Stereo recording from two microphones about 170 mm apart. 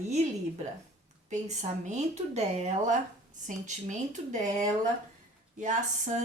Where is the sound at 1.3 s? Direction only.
45° right (ahead or behind).